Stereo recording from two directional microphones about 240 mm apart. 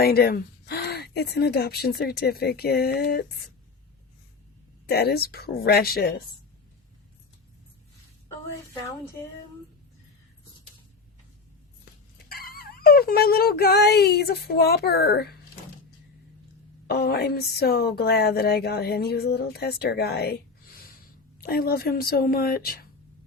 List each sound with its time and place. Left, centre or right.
0.0 s a woman's voice: left
4.9 s a woman's voice: left
12.3 s a woman's voice: left
16.8 s a woman's voice: left
21.4 s a woman's voice: left